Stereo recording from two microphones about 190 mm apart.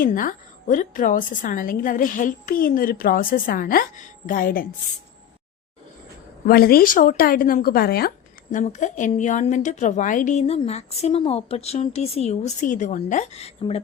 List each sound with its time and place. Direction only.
0.0 s a woman's voice: 45° left (ahead or behind)
6.5 s a woman's voice: 50° left (ahead or behind)
8.5 s a woman's voice: 40° left (ahead or behind)